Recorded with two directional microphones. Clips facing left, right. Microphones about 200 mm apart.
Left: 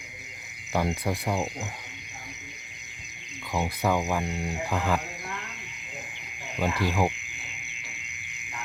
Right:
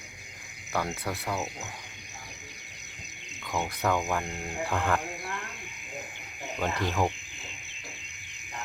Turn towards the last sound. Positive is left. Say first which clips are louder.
# left 2 dB
turn(degrees=10)  # may be behind; listen again after turning